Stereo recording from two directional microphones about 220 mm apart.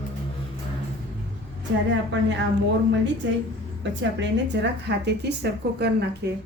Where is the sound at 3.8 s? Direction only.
55° right (ahead or behind).